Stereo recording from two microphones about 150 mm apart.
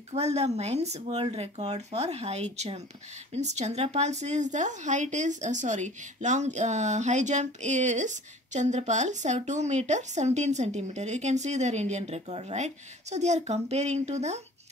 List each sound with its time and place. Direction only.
0.1 s speech: 45° right (ahead or behind)